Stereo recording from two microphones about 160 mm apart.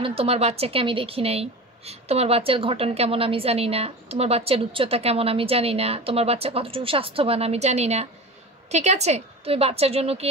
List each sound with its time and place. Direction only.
0.0 s a woman's voice: 35° right (ahead or behind)